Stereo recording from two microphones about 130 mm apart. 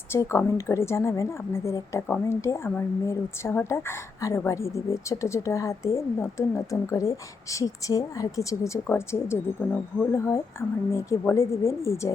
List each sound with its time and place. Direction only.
0.1 s speech: 20° left (ahead or behind)